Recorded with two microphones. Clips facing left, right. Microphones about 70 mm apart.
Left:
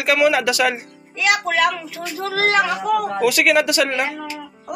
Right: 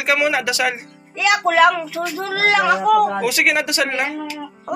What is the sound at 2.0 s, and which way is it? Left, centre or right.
Speech, right.